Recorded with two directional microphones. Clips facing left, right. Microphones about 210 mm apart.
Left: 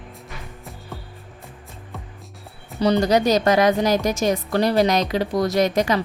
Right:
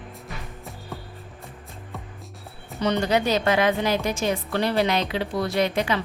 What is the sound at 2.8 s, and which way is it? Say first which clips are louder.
A woman's voice: left 5 dB; 35° left (ahead or behind).